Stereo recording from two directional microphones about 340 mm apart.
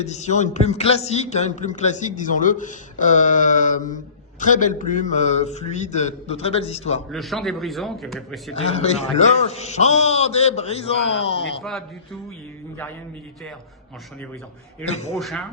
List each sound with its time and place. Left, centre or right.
0.0 s a man's voice: centre
7.1 s a man's voice: centre
8.5 s a man's voice: centre
11.6 s a man's voice: centre
14.8 s a man's voice: centre
15.1 s a man's voice: centre